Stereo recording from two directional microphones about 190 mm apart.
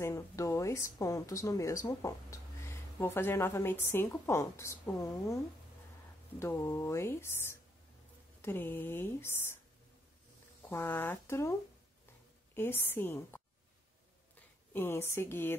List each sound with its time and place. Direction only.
0.0 s speech: 15° left (ahead or behind)
6.4 s speech: 15° left (ahead or behind)
8.4 s speech: 10° left (ahead or behind)
10.7 s speech: 10° left (ahead or behind)
12.5 s speech: 10° left (ahead or behind)